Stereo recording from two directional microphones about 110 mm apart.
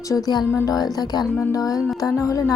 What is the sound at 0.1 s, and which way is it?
A woman's voice, 35° left (ahead or behind).